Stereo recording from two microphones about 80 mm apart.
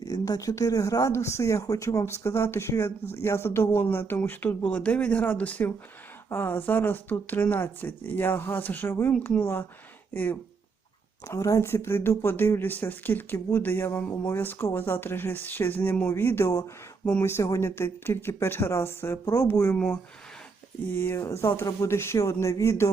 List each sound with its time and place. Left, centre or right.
0.0 s speech: left
11.3 s speech: left
20.9 s speech: left